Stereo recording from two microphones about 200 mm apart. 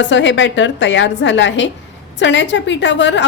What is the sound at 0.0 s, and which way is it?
A woman's voice, 65° left (ahead or behind).